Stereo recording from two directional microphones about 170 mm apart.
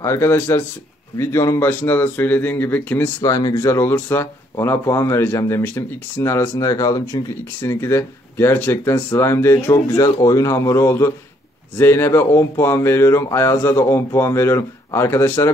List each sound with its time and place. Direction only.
0.0 s speech: 15° left (ahead or behind)